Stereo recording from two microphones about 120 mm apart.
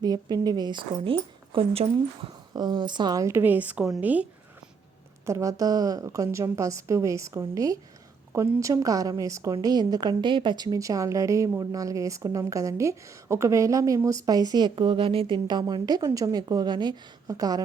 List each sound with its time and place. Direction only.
0.0 s speech: 35° right (ahead or behind); by 2.3 s 50° right (ahead or behind)
2.5 s speech: 35° right (ahead or behind); by 4.3 s 15° right (ahead or behind)
5.2 s a woman's voice: 25° right (ahead or behind)